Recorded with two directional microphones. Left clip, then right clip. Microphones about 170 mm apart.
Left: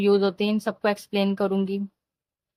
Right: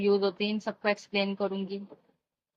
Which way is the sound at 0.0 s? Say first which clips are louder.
Left 5 dB; 55° left (ahead or behind).